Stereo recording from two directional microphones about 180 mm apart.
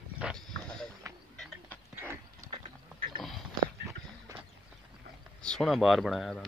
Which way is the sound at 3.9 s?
15° right (ahead or behind).